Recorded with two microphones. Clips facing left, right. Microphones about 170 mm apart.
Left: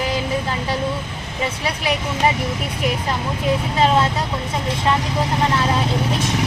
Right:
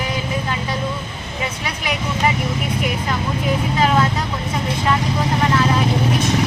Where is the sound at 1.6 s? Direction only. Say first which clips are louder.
Left 3 dB; 30° left (ahead or behind).